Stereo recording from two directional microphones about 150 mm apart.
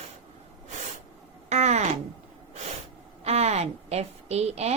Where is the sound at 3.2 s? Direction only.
45° right (ahead or behind).